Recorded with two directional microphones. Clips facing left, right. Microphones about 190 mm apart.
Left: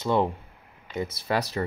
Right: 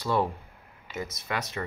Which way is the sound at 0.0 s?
20° left (ahead or behind).